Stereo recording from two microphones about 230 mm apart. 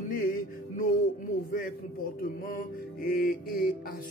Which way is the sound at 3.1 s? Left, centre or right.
Left.